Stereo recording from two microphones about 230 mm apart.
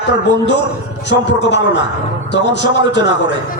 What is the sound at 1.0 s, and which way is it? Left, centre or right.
Speech, left.